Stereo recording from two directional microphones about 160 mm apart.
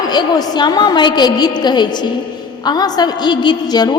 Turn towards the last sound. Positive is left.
turn(degrees=25)  # may be behind; listen again after turning